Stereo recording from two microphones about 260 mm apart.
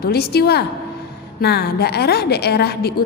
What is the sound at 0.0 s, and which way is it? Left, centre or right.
A woman's voice, left.